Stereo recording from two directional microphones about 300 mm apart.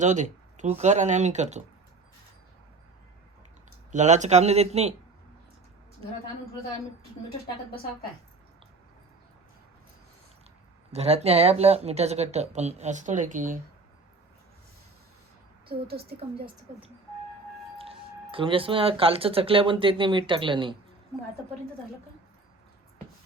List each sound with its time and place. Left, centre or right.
0.0 s speech: right
3.9 s speech: right
10.9 s speech: right
17.7 s speech: centre